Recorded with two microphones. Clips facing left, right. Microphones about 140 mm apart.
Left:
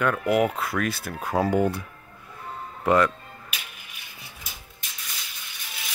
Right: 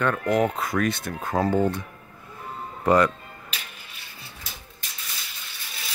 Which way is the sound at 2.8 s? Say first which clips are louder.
Right 1 dB; centre (ahead or behind).